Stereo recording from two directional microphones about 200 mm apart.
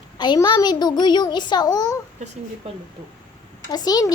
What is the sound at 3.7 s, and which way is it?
Speech, 20° left (ahead or behind).